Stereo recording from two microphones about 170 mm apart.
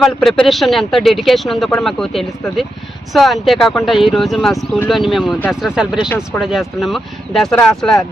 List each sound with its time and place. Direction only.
0.0 s a man's voice: centre (ahead or behind)